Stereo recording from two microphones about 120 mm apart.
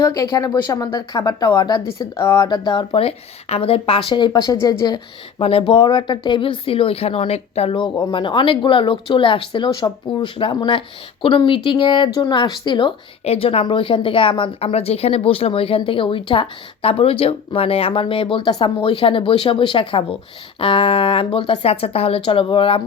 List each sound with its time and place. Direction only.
0.0 s speech: 30° left (ahead or behind)
2.5 s a woman's voice: 40° left (ahead or behind)
5.4 s a woman's voice: 55° left (ahead or behind)
8.1 s a woman's voice: 45° left (ahead or behind)
13.2 s a woman's voice: 55° left (ahead or behind)